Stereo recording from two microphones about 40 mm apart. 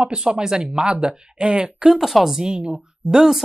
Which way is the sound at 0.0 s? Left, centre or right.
Right.